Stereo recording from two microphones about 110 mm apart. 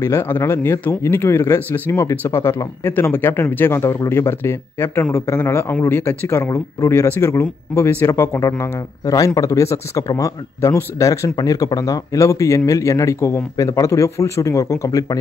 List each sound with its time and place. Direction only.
0.0 s speech: 20° left (ahead or behind)